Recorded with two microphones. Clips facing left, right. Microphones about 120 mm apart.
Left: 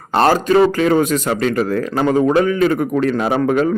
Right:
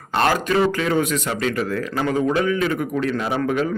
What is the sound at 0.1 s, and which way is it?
Speech, 35° left (ahead or behind).